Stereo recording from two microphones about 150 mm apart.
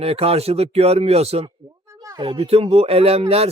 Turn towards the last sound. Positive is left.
turn(degrees=-40)  # may be behind; listen again after turning